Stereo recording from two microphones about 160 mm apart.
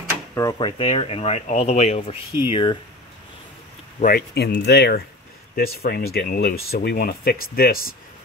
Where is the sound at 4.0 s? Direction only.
65° left (ahead or behind); by 5.0 s 90° left.